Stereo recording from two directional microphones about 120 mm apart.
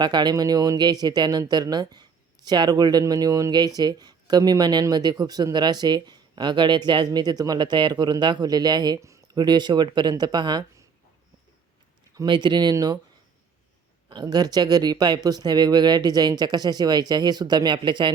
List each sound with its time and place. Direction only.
0.0 s speech: 40° right (ahead or behind)
12.1 s speech: 40° right (ahead or behind)
14.1 s speech: 35° right (ahead or behind)